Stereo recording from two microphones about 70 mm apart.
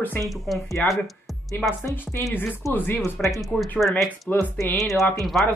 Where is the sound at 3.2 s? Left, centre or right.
Centre.